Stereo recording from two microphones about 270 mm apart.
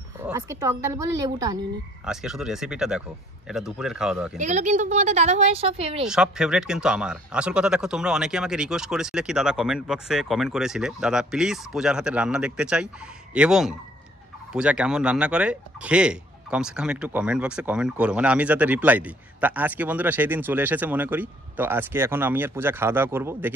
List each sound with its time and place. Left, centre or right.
0.2 s speech: centre
2.0 s speech: centre
4.4 s a woman's voice: right
6.0 s speech: centre